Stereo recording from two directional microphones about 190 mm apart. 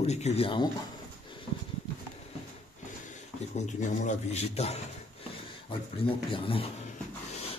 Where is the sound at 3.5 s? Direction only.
40° left (ahead or behind).